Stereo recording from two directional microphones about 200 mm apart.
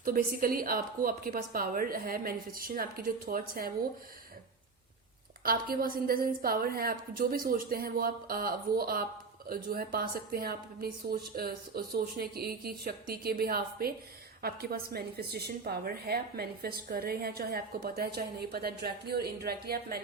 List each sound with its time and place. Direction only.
0.0 s a woman's voice: 45° right (ahead or behind)
5.4 s a woman's voice: 45° right (ahead or behind)